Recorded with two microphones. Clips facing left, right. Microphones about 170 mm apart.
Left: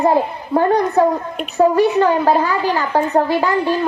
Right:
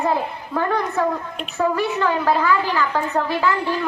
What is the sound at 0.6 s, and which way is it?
A woman's voice, 40° left (ahead or behind).